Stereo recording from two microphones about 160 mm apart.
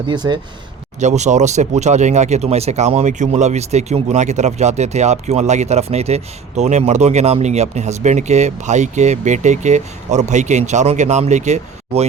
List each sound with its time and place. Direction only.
0.1 s speech: 30° right (ahead or behind)
0.9 s speech: 45° right (ahead or behind)